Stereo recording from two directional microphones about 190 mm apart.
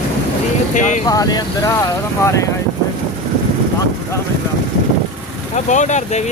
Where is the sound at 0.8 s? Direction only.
40° left (ahead or behind).